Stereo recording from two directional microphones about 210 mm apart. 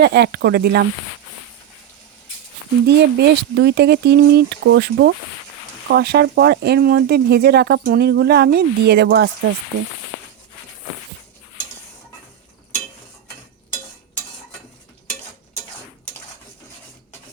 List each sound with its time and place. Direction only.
0.0 s speech: 50° right (ahead or behind)
2.8 s speech: 55° right (ahead or behind)